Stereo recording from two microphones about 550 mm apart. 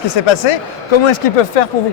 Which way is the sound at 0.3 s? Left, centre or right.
Left.